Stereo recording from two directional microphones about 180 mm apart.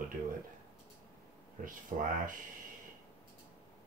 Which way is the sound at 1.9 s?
45° right (ahead or behind).